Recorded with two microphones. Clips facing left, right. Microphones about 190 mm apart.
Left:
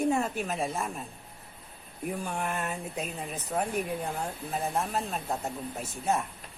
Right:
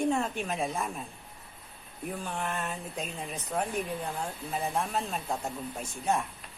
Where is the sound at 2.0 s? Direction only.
10° left (ahead or behind).